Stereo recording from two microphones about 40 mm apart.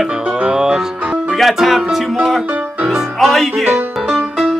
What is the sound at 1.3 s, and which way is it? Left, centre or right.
Speech, centre.